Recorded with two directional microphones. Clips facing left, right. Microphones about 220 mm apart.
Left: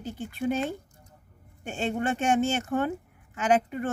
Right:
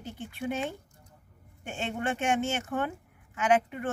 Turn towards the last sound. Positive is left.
turn(degrees=35)  # may be behind; listen again after turning